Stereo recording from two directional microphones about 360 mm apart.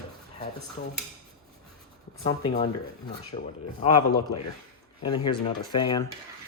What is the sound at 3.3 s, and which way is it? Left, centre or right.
Speech, centre.